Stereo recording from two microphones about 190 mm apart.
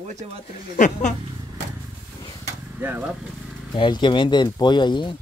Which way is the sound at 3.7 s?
25° left (ahead or behind).